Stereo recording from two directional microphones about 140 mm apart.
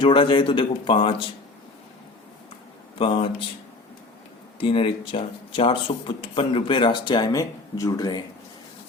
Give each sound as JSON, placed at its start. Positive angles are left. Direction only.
{"t": 0.0, "sound": "speech", "side_deg": 40}
{"t": 3.0, "sound": "speech", "side_deg": 40}
{"t": 4.6, "sound": "speech", "side_deg": 40}